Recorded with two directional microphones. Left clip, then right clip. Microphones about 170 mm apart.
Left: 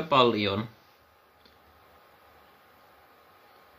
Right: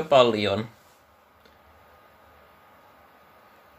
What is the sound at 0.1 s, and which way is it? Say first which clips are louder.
Speech: right 4 dB; 15° right (ahead or behind).